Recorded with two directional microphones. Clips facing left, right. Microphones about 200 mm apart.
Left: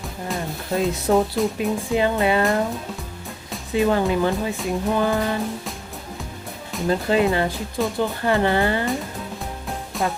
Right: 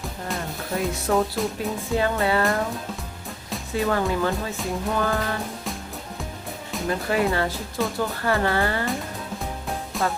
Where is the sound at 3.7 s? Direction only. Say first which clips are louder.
Left 4 dB; 20° left (ahead or behind).